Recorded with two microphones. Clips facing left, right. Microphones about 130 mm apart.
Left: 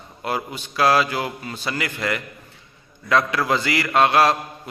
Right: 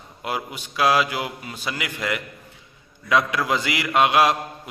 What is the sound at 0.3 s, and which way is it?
A man's voice, 10° right (ahead or behind).